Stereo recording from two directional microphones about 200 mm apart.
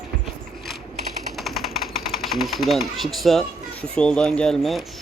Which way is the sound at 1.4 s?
Centre (ahead or behind).